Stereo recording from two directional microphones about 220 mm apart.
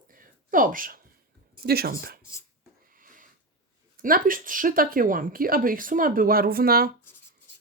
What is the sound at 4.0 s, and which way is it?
Speech, 40° right (ahead or behind).